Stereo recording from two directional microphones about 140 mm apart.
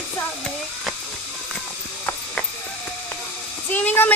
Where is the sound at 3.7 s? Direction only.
10° left (ahead or behind).